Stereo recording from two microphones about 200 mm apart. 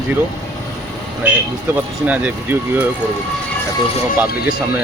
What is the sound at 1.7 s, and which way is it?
Speech, 5° right (ahead or behind).